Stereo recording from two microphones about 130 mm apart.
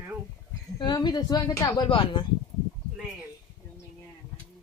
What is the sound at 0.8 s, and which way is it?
A woman's voice, 35° left (ahead or behind).